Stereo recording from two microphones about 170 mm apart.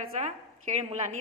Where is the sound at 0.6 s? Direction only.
45° right (ahead or behind).